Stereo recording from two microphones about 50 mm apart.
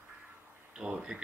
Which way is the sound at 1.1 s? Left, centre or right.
Right.